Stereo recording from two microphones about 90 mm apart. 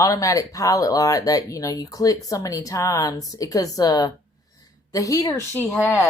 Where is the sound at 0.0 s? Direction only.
40° left (ahead or behind).